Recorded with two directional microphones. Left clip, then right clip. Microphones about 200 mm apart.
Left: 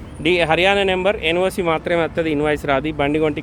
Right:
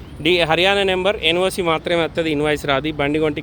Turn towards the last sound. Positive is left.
turn(degrees=0)  # may be behind; listen again after turning